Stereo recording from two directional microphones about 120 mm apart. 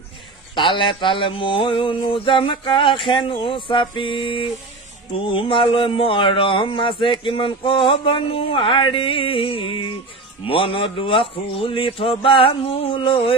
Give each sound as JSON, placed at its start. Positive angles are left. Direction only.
{"t": 0.6, "sound": "speech", "side_deg": 45}